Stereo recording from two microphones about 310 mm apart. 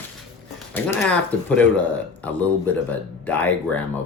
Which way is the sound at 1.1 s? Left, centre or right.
Centre.